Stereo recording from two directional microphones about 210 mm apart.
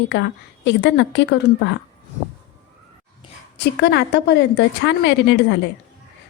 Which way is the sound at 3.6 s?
55° left (ahead or behind).